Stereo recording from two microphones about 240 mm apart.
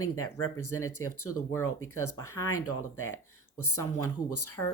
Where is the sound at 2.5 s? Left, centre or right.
Left.